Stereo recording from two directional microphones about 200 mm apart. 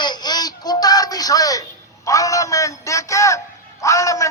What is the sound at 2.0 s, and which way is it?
A man's voice, 15° left (ahead or behind).